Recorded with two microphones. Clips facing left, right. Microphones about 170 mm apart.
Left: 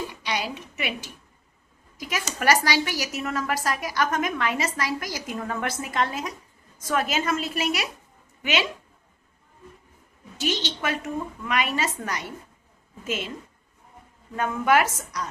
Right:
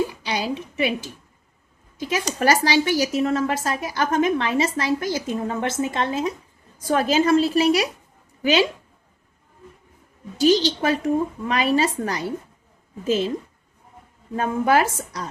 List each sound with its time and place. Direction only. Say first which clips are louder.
0.1 s a woman's voice: right 4 dB; 30° right (ahead or behind)
10.3 s a woman's voice: right 11 dB; 35° right (ahead or behind)
14.3 s a woman's voice: right 2 dB; 30° right (ahead or behind)